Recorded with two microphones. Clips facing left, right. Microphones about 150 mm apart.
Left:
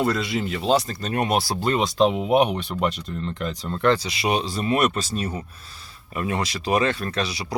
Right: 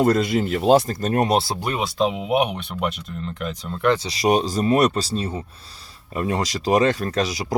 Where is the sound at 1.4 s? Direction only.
20° right (ahead or behind).